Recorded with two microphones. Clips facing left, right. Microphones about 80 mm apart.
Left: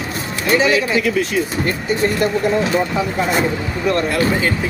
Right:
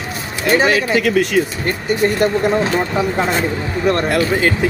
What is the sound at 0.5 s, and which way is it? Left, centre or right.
Speech, right.